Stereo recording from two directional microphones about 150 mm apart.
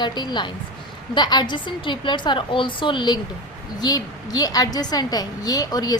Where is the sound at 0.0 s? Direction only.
30° left (ahead or behind).